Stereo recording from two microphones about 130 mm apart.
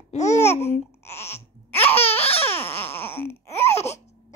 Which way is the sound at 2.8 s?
15° left (ahead or behind).